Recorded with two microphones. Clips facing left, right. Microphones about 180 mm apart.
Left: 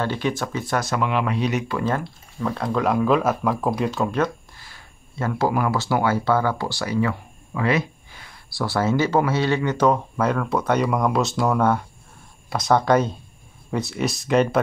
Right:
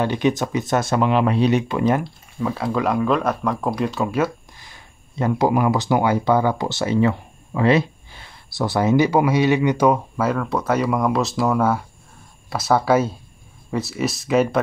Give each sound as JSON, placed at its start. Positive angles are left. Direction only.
{"t": 0.0, "sound": "speech", "side_deg": -20}
{"t": 2.5, "sound": "speech", "side_deg": -5}
{"t": 4.6, "sound": "speech", "side_deg": -20}